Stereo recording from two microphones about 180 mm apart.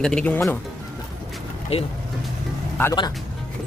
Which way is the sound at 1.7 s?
35° left (ahead or behind).